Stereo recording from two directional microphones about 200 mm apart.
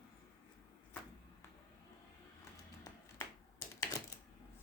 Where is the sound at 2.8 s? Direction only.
15° left (ahead or behind).